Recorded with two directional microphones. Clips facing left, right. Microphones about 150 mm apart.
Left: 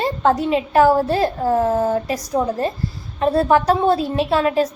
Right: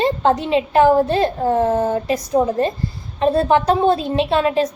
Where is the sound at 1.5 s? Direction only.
Centre (ahead or behind).